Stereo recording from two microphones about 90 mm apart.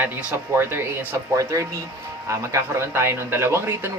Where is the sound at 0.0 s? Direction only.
25° right (ahead or behind).